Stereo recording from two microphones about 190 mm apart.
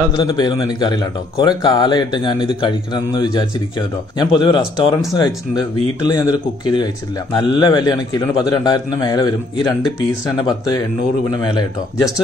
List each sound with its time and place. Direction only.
0.2 s a man's voice: 20° left (ahead or behind)
11.4 s a man's voice: 25° left (ahead or behind)